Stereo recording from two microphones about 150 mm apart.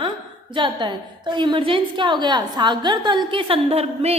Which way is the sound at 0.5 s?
30° right (ahead or behind).